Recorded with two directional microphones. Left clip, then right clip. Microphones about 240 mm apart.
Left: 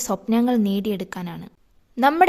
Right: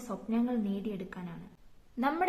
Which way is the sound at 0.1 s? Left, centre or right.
Left.